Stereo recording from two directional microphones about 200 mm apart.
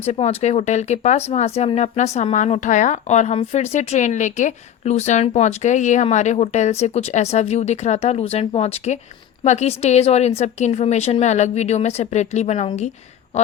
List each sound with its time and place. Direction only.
0.0 s speech: 30° left (ahead or behind)